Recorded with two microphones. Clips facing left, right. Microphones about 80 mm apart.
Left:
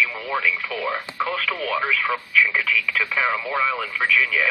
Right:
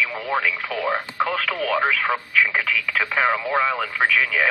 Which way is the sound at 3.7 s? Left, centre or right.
Right.